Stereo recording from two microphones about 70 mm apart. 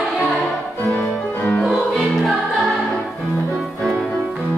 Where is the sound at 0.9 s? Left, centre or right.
Centre.